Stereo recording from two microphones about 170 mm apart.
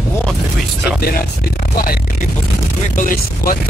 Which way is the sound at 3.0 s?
55° left (ahead or behind).